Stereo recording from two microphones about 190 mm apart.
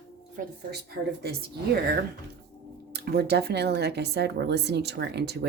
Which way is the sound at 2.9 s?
55° right (ahead or behind).